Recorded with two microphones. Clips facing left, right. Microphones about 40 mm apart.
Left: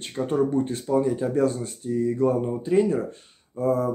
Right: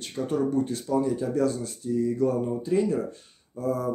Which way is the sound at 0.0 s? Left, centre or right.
Left.